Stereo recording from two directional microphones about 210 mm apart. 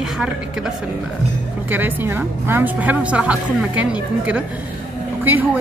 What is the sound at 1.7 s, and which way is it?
A woman's voice, 10° right (ahead or behind).